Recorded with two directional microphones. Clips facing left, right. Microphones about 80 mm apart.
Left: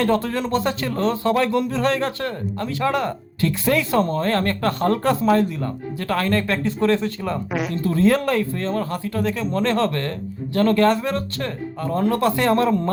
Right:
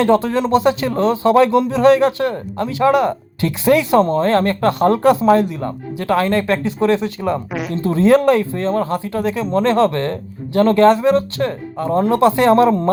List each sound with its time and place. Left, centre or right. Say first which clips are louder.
0.0 s speech: right 6 dB; centre
7.5 s speech: right 1 dB; centre
7.8 s speech: right 6 dB; right